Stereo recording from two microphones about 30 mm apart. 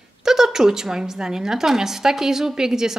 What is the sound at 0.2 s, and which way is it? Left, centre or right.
A woman's voice, centre.